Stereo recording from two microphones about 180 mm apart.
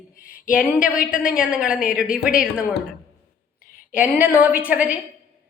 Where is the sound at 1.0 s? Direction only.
50° left (ahead or behind).